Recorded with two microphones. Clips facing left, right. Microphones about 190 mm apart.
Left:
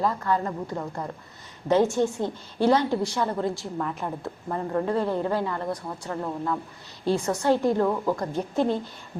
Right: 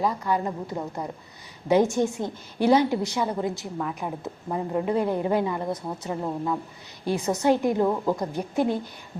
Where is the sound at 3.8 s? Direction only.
5° right (ahead or behind).